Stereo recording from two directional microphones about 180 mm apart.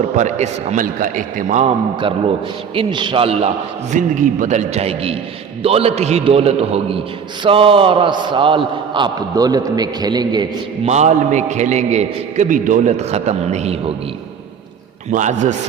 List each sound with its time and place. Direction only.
0.2 s a man's voice: 40° right (ahead or behind)
2.7 s a man's voice: 25° right (ahead or behind)
3.9 s a man's voice: 45° right (ahead or behind); by 10.4 s 25° right (ahead or behind)
10.8 s a man's voice: 40° right (ahead or behind)
15.1 s a man's voice: 40° right (ahead or behind)